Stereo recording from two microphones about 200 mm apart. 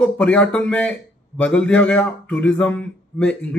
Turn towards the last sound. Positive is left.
turn(degrees=5)  # may be behind; listen again after turning